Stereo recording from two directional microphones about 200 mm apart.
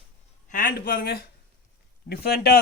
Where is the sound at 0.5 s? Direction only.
45° left (ahead or behind).